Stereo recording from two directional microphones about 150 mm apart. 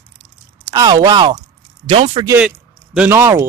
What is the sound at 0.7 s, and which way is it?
Speech, 25° right (ahead or behind).